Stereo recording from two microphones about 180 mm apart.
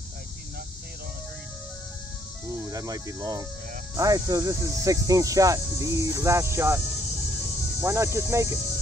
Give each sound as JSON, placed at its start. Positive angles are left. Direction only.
{"t": 2.5, "sound": "speech", "side_deg": -15}
{"t": 7.8, "sound": "speech", "side_deg": -15}